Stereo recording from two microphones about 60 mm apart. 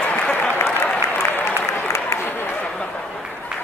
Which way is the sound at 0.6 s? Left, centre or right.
Left.